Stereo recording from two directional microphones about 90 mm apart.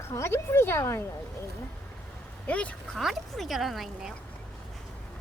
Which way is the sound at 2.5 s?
15° left (ahead or behind).